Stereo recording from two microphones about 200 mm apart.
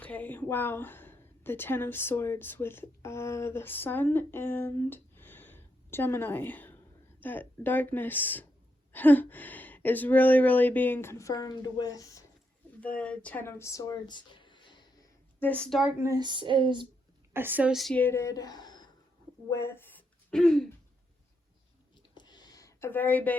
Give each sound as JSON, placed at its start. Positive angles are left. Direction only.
{"t": 0.0, "sound": "a woman's voice", "side_deg": 10}
{"t": 12.8, "sound": "speech", "side_deg": 5}
{"t": 15.4, "sound": "speech", "side_deg": 5}
{"t": 17.3, "sound": "speech", "side_deg": -10}
{"t": 22.1, "sound": "a sound", "side_deg": 20}